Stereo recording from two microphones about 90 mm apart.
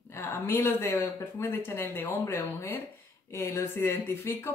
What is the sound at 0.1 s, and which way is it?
Speech, 25° left (ahead or behind).